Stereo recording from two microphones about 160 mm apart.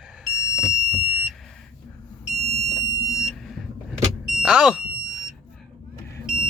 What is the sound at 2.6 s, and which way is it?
Fire alarm, 55° left (ahead or behind).